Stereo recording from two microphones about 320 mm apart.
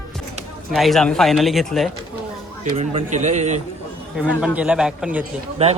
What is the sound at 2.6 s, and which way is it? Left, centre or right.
A man's voice, centre.